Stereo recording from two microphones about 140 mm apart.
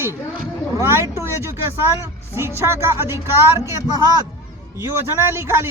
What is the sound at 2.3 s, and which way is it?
Speech, 20° right (ahead or behind).